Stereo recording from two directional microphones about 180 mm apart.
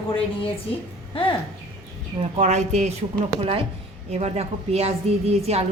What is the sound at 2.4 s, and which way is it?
A woman's voice, 40° right (ahead or behind).